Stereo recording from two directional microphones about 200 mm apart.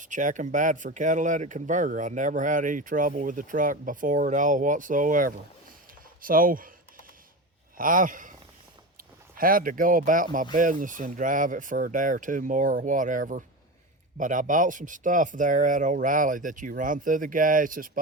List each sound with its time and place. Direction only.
0.0 s speech: 40° right (ahead or behind)
7.8 s a man's voice: 40° right (ahead or behind)